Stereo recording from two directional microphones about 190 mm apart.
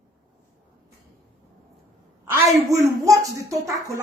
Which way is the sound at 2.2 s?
10° right (ahead or behind).